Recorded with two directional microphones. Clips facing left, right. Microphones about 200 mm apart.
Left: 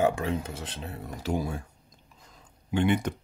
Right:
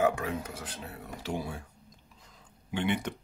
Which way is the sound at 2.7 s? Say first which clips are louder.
Left 5 dB; 45° left (ahead or behind).